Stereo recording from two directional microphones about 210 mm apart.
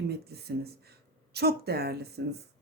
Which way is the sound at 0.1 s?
50° right (ahead or behind).